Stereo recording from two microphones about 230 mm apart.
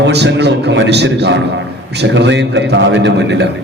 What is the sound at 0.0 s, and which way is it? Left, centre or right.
A man's voice, right.